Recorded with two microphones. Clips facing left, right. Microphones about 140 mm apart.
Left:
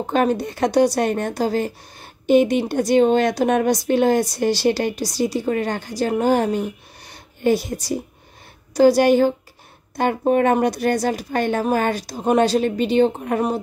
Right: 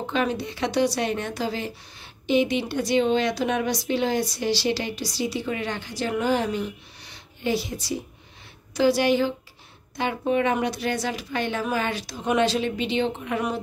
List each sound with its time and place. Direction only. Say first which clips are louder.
0.0 s speech: left 6 dB; 45° left (ahead or behind)